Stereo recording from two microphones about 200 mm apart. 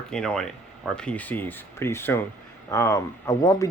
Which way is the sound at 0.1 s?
5° left (ahead or behind).